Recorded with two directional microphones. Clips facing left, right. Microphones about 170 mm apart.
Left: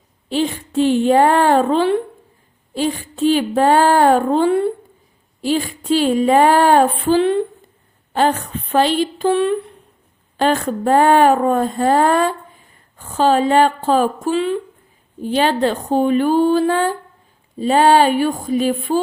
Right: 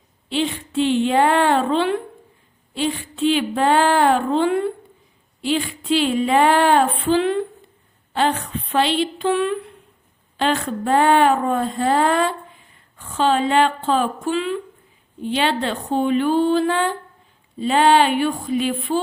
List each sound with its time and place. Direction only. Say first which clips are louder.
0.3 s speech: left 3 dB; 40° left (ahead or behind)
2.7 s female singing: left 3 dB; 40° left (ahead or behind)
8.1 s speech: left 3 dB; 45° left (ahead or behind)
12.7 s female singing: left 4 dB; 40° left (ahead or behind)
15.2 s speech: left 5 dB; 40° left (ahead or behind)
17.6 s female singing: left 3 dB; 40° left (ahead or behind)